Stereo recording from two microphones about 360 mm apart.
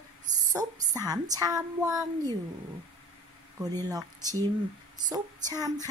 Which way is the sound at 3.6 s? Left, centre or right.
Centre.